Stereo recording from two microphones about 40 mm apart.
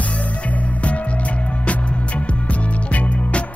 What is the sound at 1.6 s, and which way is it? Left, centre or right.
Music, left.